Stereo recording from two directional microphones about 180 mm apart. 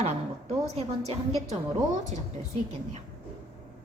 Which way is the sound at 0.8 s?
35° right (ahead or behind).